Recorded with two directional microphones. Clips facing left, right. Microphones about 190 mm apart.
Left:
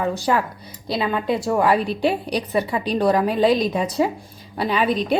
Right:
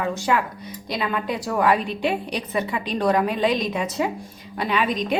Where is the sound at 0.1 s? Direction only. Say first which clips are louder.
Left 2 dB; 35° left (ahead or behind).